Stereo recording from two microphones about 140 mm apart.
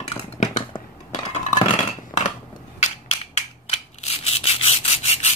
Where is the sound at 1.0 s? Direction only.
60° left (ahead or behind).